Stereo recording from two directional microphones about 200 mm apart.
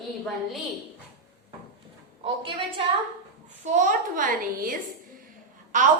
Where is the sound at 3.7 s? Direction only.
40° right (ahead or behind).